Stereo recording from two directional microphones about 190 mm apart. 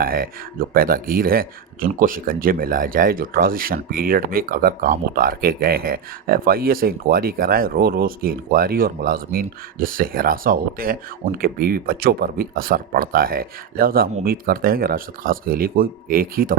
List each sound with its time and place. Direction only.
0.0 s speech: 50° right (ahead or behind)